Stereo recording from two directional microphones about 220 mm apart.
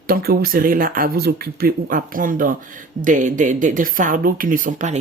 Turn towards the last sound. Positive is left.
turn(degrees=-35)  # may be behind; listen again after turning